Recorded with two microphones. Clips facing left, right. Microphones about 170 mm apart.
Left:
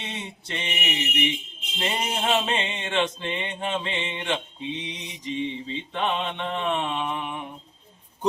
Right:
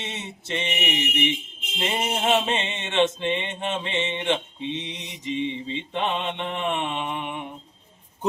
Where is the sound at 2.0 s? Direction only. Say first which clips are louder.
Right 3 dB; 20° right (ahead or behind).